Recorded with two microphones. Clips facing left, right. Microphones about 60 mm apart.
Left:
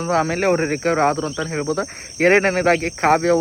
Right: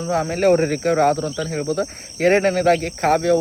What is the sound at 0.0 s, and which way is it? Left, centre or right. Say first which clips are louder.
Speech: even; left.